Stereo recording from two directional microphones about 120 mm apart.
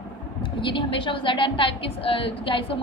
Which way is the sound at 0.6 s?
45° left (ahead or behind).